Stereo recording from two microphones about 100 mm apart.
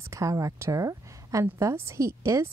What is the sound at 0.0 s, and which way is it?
A woman's voice, 30° right (ahead or behind).